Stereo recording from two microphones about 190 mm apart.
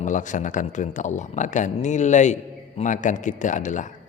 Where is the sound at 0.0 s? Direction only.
40° left (ahead or behind).